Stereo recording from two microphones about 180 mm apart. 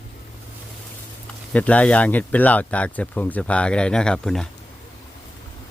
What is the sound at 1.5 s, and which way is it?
Speech, 10° left (ahead or behind).